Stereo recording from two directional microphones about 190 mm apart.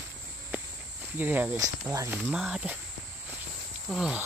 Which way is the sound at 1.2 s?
10° right (ahead or behind).